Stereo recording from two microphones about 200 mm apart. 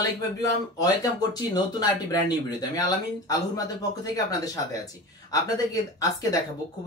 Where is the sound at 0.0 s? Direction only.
20° left (ahead or behind).